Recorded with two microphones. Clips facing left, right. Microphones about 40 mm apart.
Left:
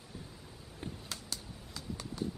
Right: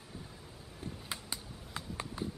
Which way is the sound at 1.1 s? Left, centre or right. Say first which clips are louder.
Right 2 dB; right.